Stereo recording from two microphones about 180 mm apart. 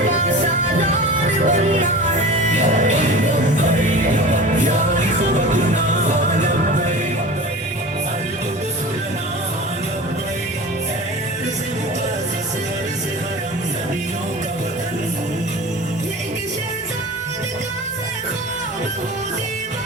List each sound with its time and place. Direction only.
0.8 s music: 40° right (ahead or behind)